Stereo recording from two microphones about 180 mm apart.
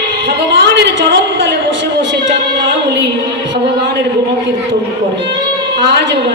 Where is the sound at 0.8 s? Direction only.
80° right.